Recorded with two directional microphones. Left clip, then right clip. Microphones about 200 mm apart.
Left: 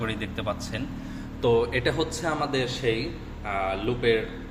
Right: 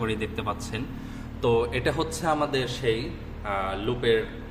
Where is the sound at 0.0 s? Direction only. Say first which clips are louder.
Right 1 dB; 15° right (ahead or behind).